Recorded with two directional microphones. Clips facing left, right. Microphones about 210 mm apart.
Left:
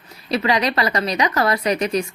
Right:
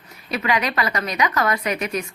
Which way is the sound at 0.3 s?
35° left (ahead or behind).